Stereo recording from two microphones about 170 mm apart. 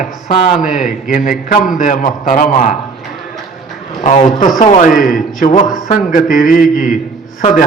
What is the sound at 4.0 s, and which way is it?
A man's voice, 40° left (ahead or behind).